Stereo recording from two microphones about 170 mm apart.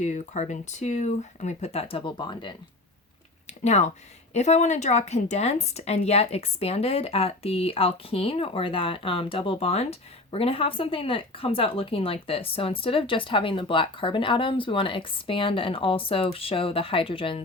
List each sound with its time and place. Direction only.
0.0 s speech: 45° left (ahead or behind); by 2.6 s 30° left (ahead or behind)
3.6 s a woman's voice: 40° left (ahead or behind)